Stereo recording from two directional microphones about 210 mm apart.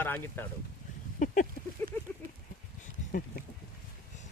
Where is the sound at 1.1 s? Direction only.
40° left (ahead or behind).